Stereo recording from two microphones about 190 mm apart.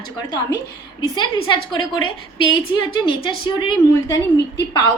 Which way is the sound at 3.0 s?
25° left (ahead or behind).